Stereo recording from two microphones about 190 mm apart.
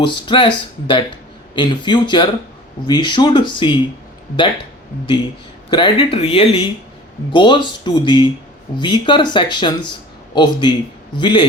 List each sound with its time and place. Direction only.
0.0 s speech: 25° left (ahead or behind)
5.7 s speech: 25° left (ahead or behind)